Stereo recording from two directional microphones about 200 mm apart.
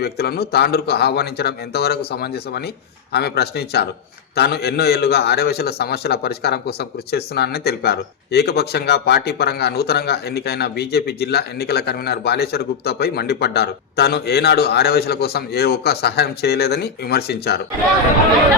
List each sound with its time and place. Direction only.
0.0 s a man's voice: 50° left (ahead or behind)